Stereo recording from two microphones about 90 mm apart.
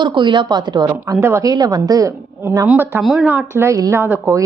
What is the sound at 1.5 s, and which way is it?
Speech, 45° right (ahead or behind).